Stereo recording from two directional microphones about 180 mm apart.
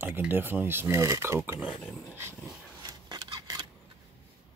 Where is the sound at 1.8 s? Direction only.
10° left (ahead or behind).